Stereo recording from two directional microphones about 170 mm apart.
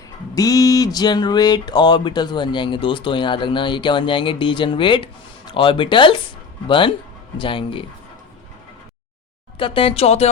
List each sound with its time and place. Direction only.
0.3 s speech: 20° left (ahead or behind)
9.6 s speech: 30° left (ahead or behind)